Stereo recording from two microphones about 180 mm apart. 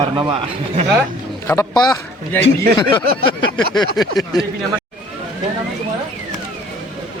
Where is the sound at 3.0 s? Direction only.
55° right (ahead or behind).